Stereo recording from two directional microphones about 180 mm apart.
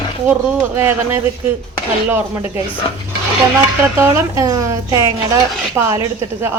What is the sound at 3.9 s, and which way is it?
A woman's voice, 15° right (ahead or behind).